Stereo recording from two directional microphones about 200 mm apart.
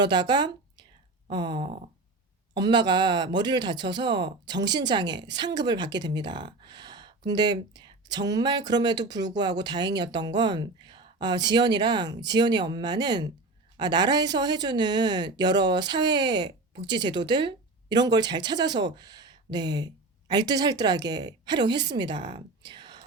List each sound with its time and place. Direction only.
0.0 s speech: 20° right (ahead or behind)